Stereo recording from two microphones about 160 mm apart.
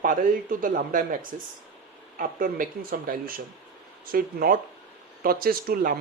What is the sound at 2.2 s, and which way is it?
Speech, 60° right (ahead or behind).